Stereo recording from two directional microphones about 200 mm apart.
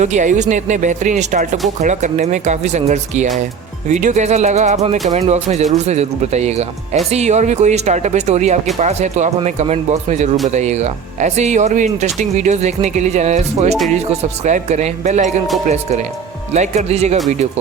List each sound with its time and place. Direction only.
0.0 s speech: 35° right (ahead or behind)